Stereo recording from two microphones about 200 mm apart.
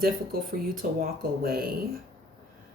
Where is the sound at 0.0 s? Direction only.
45° right (ahead or behind).